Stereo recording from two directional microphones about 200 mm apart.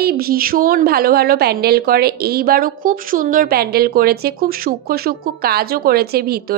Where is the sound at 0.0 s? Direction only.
50° right (ahead or behind).